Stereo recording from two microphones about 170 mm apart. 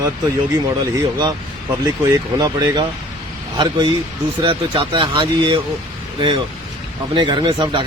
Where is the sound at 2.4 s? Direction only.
25° right (ahead or behind).